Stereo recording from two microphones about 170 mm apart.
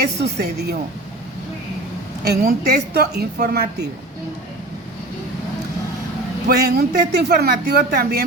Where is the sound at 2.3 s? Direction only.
70° right (ahead or behind).